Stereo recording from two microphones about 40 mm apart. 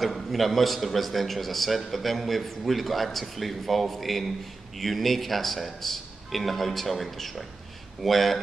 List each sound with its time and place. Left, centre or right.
0.0 s a man's voice: centre